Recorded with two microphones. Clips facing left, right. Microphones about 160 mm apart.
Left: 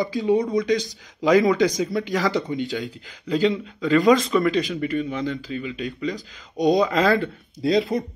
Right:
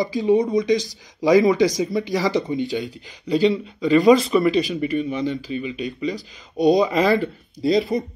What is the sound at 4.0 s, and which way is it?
Speech, centre (ahead or behind).